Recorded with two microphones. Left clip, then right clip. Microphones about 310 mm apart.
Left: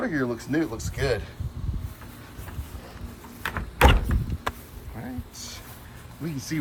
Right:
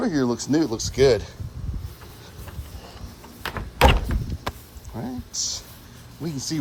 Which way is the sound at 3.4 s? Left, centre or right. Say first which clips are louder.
Right 2 dB; right.